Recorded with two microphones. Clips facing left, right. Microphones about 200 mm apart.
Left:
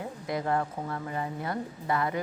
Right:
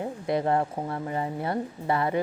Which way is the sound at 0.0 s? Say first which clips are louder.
Right 6 dB; 25° right (ahead or behind).